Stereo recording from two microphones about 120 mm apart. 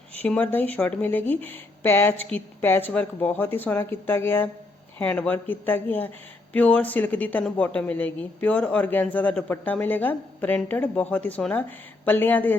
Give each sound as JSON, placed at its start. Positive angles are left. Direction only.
{"t": 0.2, "sound": "speech", "side_deg": 15}